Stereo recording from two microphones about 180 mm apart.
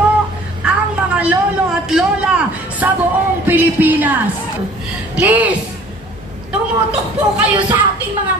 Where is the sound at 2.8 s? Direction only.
10° right (ahead or behind).